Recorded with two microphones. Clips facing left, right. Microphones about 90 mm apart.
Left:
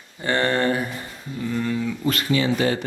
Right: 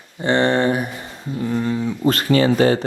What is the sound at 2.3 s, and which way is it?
Speech, 45° right (ahead or behind).